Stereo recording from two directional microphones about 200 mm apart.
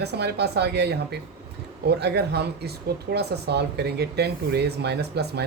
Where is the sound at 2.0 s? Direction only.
55° right (ahead or behind).